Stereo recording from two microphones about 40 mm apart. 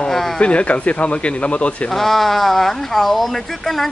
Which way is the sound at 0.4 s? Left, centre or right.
Left.